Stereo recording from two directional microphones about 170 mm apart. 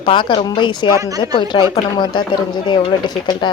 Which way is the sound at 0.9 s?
20° right (ahead or behind).